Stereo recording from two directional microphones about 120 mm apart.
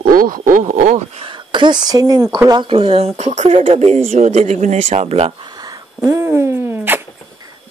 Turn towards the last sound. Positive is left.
turn(degrees=-20)  # may be behind; listen again after turning